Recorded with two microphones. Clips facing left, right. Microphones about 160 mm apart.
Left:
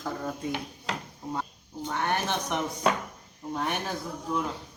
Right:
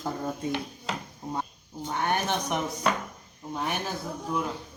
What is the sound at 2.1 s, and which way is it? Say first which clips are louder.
Speech: right 2 dB; 15° right (ahead or behind).